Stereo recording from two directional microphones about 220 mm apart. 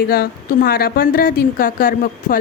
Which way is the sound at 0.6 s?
45° left (ahead or behind).